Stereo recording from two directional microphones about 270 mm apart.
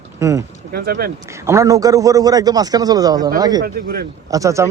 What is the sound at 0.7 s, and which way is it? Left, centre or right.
Speech, right.